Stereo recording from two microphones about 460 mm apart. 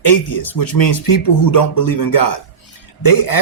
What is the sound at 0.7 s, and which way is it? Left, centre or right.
Speech, left.